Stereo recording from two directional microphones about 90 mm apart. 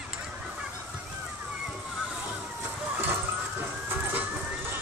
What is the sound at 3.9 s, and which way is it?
Emergency vehicle, 20° right (ahead or behind).